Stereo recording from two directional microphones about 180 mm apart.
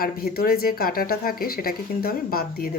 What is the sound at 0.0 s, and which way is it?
Speech, 55° left (ahead or behind).